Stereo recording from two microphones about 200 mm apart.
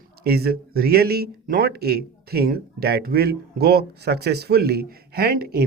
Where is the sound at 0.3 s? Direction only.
50° right (ahead or behind).